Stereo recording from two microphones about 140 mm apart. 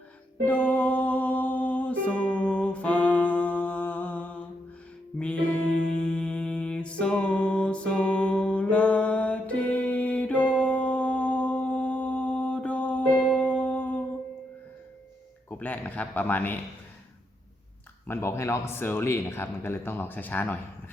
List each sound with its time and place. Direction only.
0.4 s music: 10° left (ahead or behind)
15.4 s a sound: 10° left (ahead or behind)
18.0 s speech: 20° left (ahead or behind)